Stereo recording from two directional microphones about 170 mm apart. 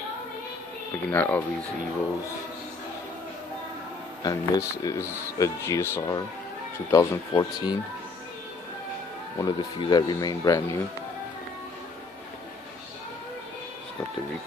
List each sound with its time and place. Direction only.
1.1 s speech: 10° left (ahead or behind)
4.2 s speech: 20° left (ahead or behind)
9.4 s speech: 25° left (ahead or behind)